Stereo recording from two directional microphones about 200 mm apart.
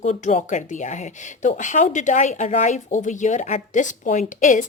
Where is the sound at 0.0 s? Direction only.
35° left (ahead or behind).